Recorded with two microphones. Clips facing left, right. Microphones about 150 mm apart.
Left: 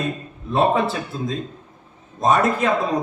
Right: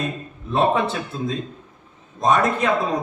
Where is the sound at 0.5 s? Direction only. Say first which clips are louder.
Left 1 dB; 35° left (ahead or behind).